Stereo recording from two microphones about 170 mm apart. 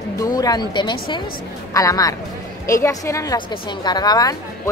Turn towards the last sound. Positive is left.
turn(degrees=20)  # may be behind; listen again after turning